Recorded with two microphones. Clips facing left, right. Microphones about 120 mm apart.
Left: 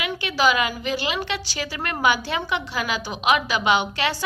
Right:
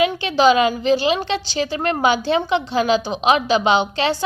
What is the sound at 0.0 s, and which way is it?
A woman's voice, 30° right (ahead or behind).